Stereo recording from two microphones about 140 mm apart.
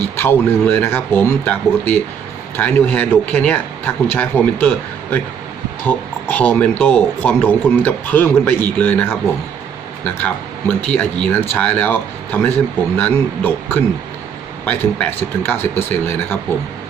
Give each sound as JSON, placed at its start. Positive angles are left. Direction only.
{"t": 0.0, "sound": "speech", "side_deg": 15}
{"t": 5.8, "sound": "speech", "side_deg": 10}
{"t": 10.2, "sound": "speech", "side_deg": 10}